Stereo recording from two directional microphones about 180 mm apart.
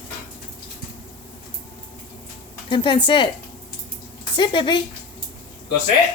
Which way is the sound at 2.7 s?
25° left (ahead or behind).